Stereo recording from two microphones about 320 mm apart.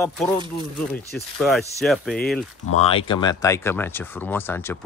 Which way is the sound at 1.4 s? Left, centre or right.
Centre.